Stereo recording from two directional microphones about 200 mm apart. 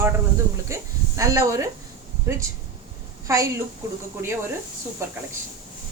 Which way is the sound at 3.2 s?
15° right (ahead or behind).